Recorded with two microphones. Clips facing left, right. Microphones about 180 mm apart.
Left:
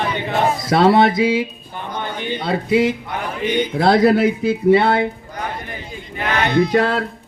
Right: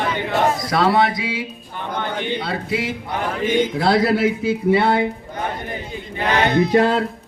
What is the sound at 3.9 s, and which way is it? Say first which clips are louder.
Music: left 4 dB; 20° left (ahead or behind).